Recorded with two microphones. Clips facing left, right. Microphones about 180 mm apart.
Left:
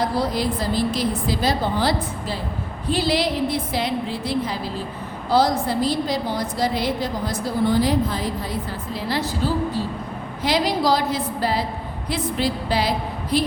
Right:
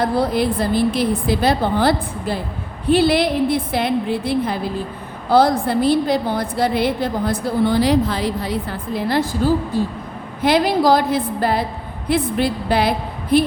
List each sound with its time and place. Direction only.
0.0 s a woman's voice: 55° right (ahead or behind)